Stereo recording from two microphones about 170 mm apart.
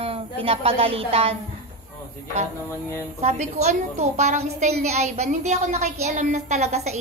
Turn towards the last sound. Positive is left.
turn(degrees=-40)  # may be behind; listen again after turning